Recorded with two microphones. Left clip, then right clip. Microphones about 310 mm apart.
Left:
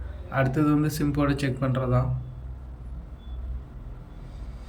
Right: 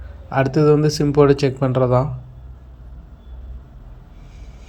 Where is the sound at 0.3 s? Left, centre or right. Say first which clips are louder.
Right 9 dB; centre.